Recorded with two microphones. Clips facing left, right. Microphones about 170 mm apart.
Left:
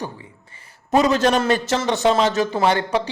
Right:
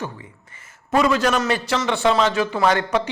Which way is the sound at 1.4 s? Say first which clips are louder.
Left 2 dB; 45° left (ahead or behind).